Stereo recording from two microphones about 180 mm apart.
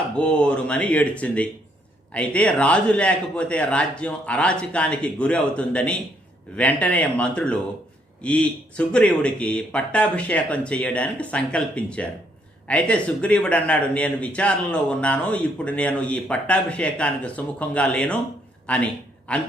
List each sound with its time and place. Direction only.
0.2 s a man's voice: 5° left (ahead or behind)